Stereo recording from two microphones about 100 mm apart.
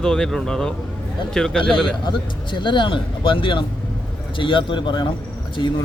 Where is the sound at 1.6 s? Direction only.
50° left (ahead or behind).